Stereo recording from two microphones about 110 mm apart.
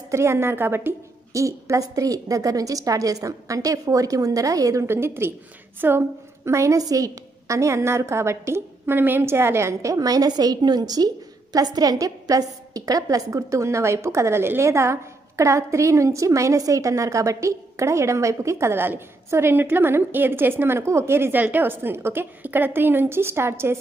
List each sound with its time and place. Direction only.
0.1 s a woman's voice: 25° right (ahead or behind)